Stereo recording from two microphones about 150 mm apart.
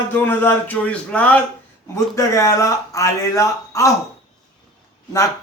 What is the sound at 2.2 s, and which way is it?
Speech, 20° left (ahead or behind).